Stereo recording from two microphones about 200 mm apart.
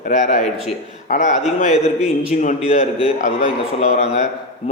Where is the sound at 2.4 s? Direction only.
35° left (ahead or behind).